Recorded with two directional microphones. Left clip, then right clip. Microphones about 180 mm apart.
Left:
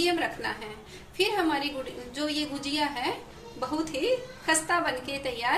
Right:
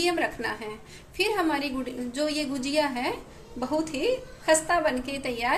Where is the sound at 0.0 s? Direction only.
45° right (ahead or behind).